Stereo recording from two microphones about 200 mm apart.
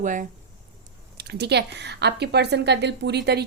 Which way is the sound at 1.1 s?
55° right (ahead or behind).